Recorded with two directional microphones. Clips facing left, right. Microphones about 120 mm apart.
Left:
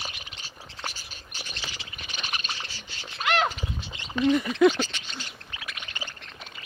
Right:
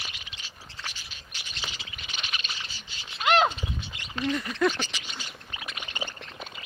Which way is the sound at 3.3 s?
25° right (ahead or behind).